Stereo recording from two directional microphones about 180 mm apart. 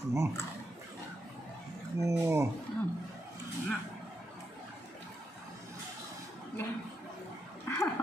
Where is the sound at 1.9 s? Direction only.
15° right (ahead or behind).